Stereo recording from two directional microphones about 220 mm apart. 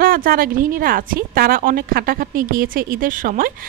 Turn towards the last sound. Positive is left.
turn(degrees=-40)  # may be behind; listen again after turning